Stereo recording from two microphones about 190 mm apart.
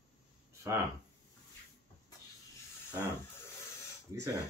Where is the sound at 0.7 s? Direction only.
15° right (ahead or behind).